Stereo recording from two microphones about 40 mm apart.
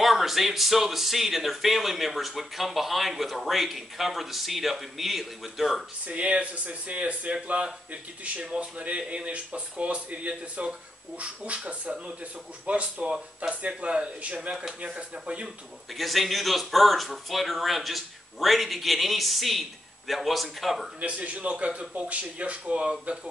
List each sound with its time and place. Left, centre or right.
0.0 s speech: centre
6.0 s a man's voice: right
15.4 s speech: centre
21.0 s a man's voice: right